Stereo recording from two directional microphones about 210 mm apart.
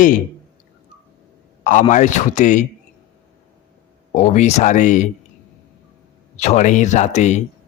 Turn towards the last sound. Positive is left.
turn(degrees=35)  # may be behind; listen again after turning